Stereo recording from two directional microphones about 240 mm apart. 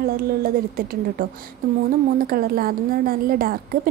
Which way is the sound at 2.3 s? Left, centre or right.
Right.